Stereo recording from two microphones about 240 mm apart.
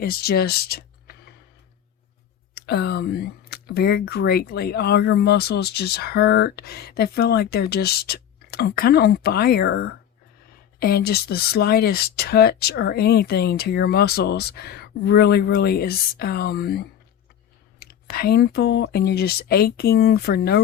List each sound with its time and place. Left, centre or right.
0.0 s speech: left
2.6 s speech: left